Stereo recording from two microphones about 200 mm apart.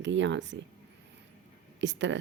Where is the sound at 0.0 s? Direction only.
65° right (ahead or behind).